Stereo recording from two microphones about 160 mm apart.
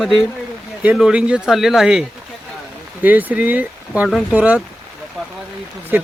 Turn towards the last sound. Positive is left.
turn(degrees=-10)  # may be behind; listen again after turning